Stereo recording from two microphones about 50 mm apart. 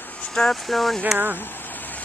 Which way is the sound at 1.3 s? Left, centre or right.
Left.